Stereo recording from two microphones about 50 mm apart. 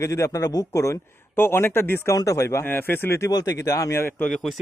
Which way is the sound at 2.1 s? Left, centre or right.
Left.